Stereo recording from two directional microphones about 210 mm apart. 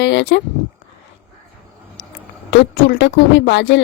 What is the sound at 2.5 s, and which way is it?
Speech, 50° left (ahead or behind).